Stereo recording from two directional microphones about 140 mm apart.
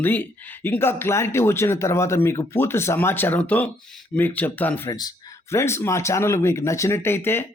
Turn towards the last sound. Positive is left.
turn(degrees=15)  # may be behind; listen again after turning